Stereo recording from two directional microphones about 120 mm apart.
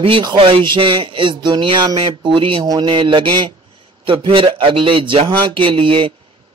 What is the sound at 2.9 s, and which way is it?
Speech, 45° right (ahead or behind).